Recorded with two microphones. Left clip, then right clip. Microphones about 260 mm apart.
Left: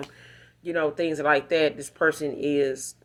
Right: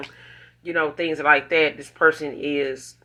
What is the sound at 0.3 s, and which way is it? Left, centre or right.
Speech, left.